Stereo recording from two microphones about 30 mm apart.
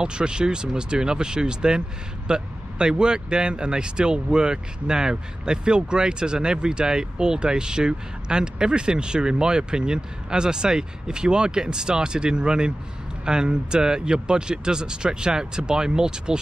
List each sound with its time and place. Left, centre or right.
0.0 s speech: right